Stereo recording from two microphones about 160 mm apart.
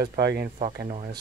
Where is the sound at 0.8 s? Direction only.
50° right (ahead or behind).